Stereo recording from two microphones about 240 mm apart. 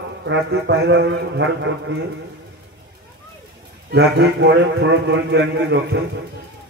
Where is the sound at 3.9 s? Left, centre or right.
Right.